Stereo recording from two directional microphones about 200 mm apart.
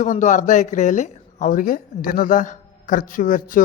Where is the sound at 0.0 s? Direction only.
40° left (ahead or behind).